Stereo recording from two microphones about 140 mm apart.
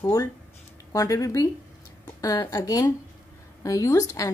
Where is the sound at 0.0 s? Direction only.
25° left (ahead or behind).